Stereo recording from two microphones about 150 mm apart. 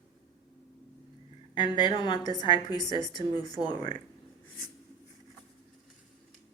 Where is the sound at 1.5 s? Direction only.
30° left (ahead or behind).